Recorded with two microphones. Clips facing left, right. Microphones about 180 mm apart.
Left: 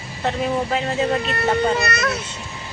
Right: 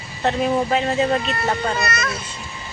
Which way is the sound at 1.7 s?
65° left (ahead or behind).